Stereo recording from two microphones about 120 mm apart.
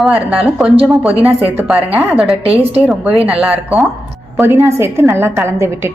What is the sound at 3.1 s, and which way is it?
Speech, 50° right (ahead or behind).